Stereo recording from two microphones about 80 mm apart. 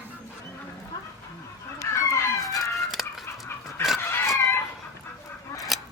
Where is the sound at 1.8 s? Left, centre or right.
Left.